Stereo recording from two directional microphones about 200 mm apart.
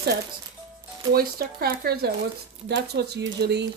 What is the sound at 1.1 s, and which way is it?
Speech, 50° right (ahead or behind).